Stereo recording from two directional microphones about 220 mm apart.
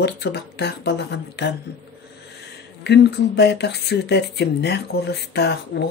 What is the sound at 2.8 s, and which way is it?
Speech, 50° left (ahead or behind).